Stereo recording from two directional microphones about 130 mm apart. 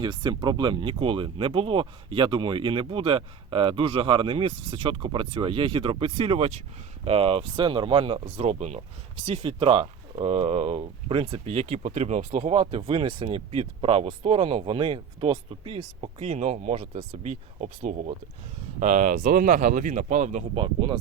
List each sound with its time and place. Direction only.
0.0 s speech: 35° right (ahead or behind); by 18.1 s 65° right (ahead or behind)
18.8 s speech: 85° right; by 20.4 s 70° right (ahead or behind)
20.6 s speech: 40° right (ahead or behind)